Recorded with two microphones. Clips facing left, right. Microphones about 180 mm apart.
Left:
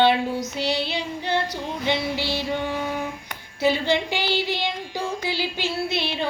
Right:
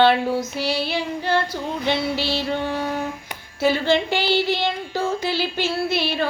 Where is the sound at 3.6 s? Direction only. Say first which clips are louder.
Right 2 dB; 15° left (ahead or behind).